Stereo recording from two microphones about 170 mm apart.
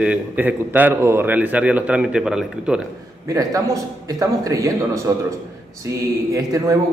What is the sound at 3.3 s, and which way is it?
A man's voice, 20° right (ahead or behind).